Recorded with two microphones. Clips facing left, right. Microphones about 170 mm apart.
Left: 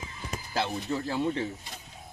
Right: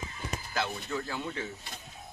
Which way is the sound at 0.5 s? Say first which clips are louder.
Left 4 dB; 30° left (ahead or behind).